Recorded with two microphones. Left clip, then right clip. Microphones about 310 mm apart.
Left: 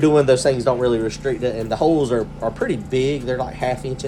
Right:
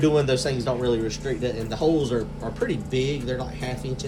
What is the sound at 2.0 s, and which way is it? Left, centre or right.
Speech, centre.